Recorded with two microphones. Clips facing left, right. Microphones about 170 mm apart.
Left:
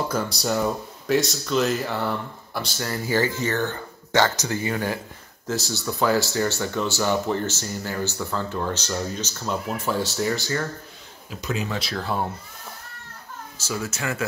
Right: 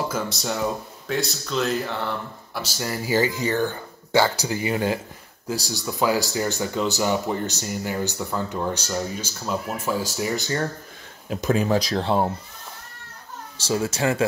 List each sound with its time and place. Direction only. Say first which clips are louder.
1.0 s speech: left 5 dB; centre (ahead or behind)
2.6 s speech: right 1 dB; 10° right (ahead or behind)
11.2 s speech: right 7 dB; 50° right (ahead or behind)
12.0 s speech: right 5 dB; 30° right (ahead or behind)
13.6 s speech: right 6 dB; 30° right (ahead or behind)